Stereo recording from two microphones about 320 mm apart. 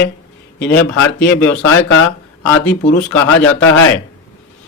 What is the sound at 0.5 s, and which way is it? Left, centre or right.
Speech, centre.